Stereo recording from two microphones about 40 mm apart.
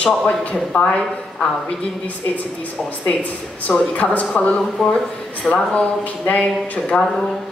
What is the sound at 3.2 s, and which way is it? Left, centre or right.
Speech, left.